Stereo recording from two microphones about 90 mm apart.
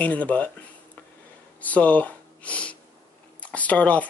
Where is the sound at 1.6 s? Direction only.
15° left (ahead or behind).